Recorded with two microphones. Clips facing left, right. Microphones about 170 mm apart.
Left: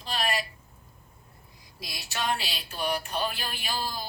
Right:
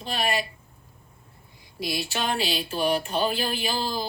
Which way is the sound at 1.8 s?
25° right (ahead or behind).